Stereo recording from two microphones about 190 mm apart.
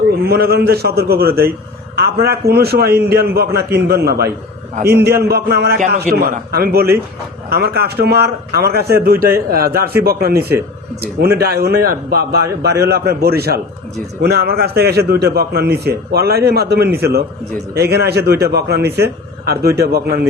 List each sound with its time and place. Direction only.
0.3 s a man's voice: 55° right (ahead or behind)